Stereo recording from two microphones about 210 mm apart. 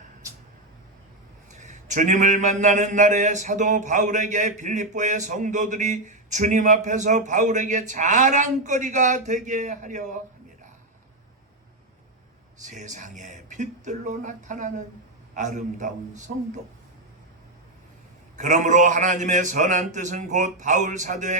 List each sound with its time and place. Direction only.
1.5 s a man's voice: 35° right (ahead or behind)
12.6 s a man's voice: 35° right (ahead or behind)
18.3 s a man's voice: 35° right (ahead or behind)